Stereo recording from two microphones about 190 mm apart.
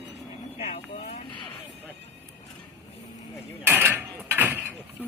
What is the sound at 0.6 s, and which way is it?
Vehicle, 35° left (ahead or behind).